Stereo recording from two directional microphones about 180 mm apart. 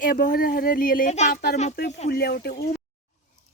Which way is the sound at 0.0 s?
50° left (ahead or behind).